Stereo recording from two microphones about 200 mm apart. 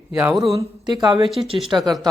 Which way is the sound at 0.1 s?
10° right (ahead or behind).